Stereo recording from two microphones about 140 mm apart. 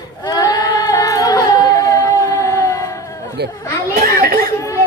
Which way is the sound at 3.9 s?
90° right.